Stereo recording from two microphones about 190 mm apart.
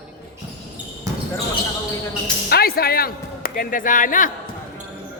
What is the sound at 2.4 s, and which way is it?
A man's voice, 55° left (ahead or behind).